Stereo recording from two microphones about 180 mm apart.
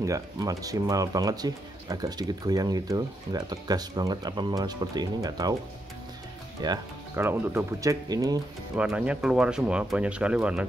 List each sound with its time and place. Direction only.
0.0 s speech: 20° right (ahead or behind)
6.6 s speech: 25° right (ahead or behind)
7.2 s speech: 15° right (ahead or behind)
8.7 s speech: 5° right (ahead or behind)